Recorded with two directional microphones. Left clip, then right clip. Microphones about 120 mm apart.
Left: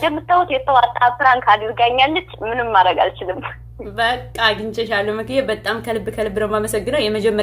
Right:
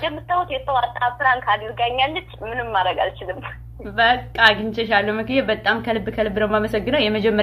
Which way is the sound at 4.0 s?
5° left (ahead or behind).